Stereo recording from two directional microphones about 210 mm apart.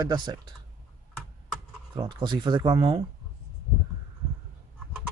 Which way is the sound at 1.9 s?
20° right (ahead or behind).